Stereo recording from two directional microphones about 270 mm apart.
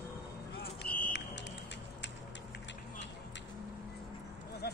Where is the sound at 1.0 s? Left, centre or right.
Left.